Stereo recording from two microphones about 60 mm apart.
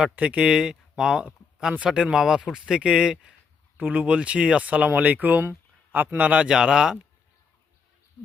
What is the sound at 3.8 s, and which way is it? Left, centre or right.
Speech, right.